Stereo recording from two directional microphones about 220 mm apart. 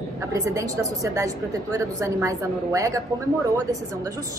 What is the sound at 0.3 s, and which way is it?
A woman's voice, 15° right (ahead or behind).